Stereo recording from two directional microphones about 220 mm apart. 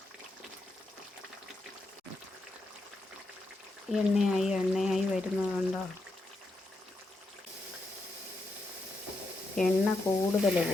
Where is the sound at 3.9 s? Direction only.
Centre (ahead or behind).